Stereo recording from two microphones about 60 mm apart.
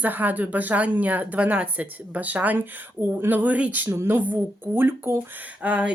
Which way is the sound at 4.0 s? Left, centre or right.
Right.